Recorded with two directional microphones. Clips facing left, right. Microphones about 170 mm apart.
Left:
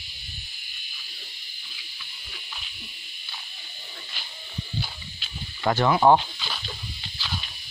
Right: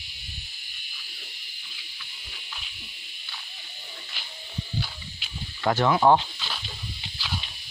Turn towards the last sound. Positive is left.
turn(degrees=-10)  # may be behind; listen again after turning